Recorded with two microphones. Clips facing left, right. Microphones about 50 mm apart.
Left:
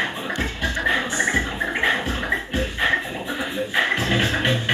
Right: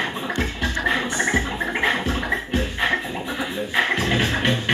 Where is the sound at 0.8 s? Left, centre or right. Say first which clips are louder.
Left 1 dB; centre.